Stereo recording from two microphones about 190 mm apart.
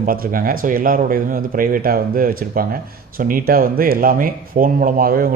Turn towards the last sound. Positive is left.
turn(degrees=-50)  # may be behind; listen again after turning